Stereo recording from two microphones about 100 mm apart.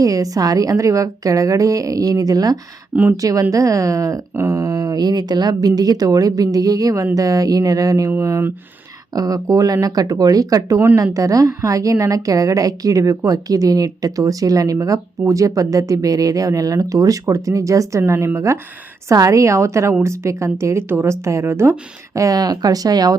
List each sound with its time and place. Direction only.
0.0 s a woman's voice: 35° right (ahead or behind)